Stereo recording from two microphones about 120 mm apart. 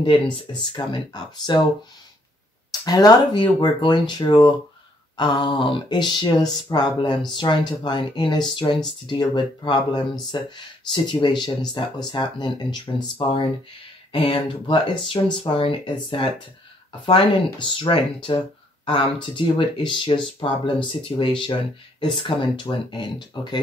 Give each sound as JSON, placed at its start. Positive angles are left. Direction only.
{"t": 0.0, "sound": "speech", "side_deg": 40}
{"t": 2.8, "sound": "speech", "side_deg": 30}